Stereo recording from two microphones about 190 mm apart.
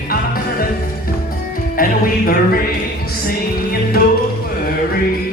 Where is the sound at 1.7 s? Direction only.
50° left (ahead or behind).